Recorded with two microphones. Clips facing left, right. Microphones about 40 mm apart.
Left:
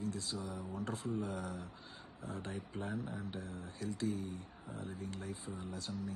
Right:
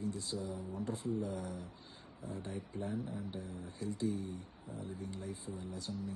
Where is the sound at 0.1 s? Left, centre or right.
Left.